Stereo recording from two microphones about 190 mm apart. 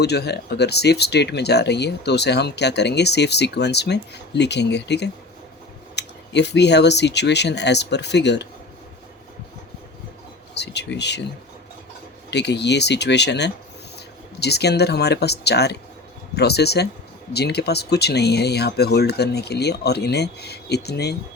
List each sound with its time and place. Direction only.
0.0 s speech: 60° left (ahead or behind)
10.5 s speech: 65° left (ahead or behind)
12.3 s speech: 65° left (ahead or behind)